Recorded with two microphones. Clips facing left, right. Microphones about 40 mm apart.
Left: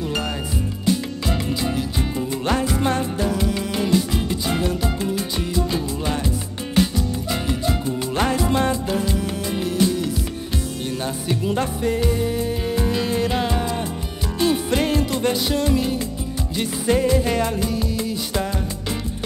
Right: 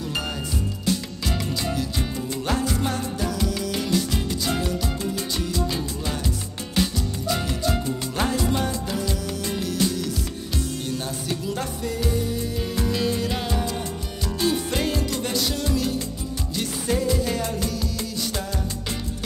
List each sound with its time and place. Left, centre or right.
0.8 s music: centre
2.6 s music: left
8.4 s music: left
11.4 s music: left
16.8 s music: left
17.6 s music: centre